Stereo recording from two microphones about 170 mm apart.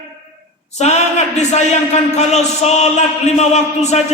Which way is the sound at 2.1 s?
40° left (ahead or behind).